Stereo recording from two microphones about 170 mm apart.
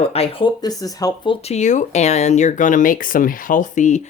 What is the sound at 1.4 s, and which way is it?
Speech, 40° left (ahead or behind).